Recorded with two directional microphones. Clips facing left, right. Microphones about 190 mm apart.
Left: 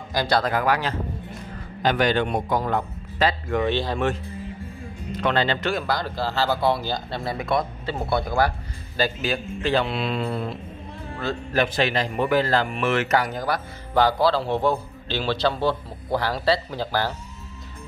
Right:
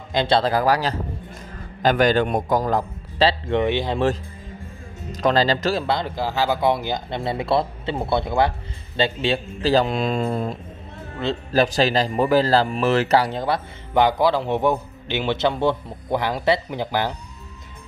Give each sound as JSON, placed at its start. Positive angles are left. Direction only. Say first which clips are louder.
{"t": 0.1, "sound": "a man's voice", "louder": "right 3 dB", "side_deg": -25}
{"t": 3.6, "sound": "speech", "louder": "right 2 dB", "side_deg": -20}
{"t": 5.2, "sound": "a man's voice", "louder": "right 4 dB", "side_deg": -35}